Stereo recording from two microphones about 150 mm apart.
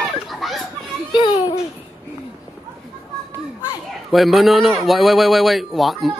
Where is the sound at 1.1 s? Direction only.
30° left (ahead or behind).